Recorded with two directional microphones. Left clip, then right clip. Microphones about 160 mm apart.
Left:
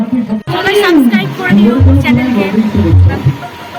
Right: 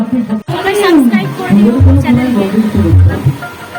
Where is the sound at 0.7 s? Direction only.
15° right (ahead or behind).